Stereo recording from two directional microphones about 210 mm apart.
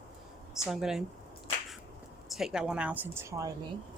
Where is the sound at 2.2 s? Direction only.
Centre (ahead or behind).